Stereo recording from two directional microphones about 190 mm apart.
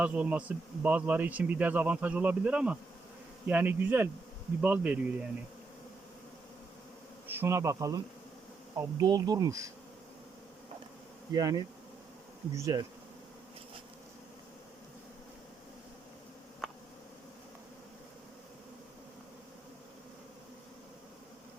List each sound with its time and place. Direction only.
0.0 s speech: 10° right (ahead or behind)
7.3 s speech: 10° right (ahead or behind)
8.7 s insect: 20° right (ahead or behind)
11.3 s insect: 20° right (ahead or behind)
12.5 s speech: 15° right (ahead or behind)
16.6 s a sound: centre (ahead or behind)